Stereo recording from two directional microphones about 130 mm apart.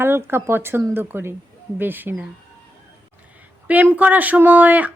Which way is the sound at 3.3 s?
10° right (ahead or behind).